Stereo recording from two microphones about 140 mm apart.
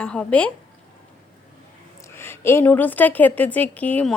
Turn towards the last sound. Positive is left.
turn(degrees=10)  # may be behind; listen again after turning